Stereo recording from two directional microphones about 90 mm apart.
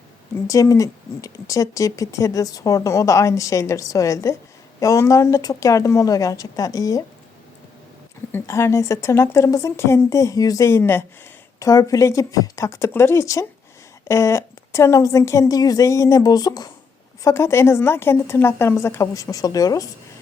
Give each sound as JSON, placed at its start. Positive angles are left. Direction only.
{"t": 0.4, "sound": "speech", "side_deg": 40}
{"t": 8.3, "sound": "speech", "side_deg": 30}
{"t": 11.6, "sound": "speech", "side_deg": 40}
{"t": 17.2, "sound": "a woman's voice", "side_deg": 30}